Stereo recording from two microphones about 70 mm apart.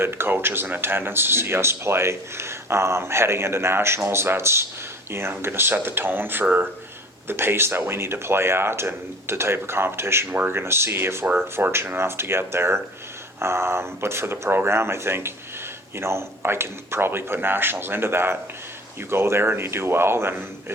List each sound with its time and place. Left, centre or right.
0.0 s speech: right
7.3 s speech: right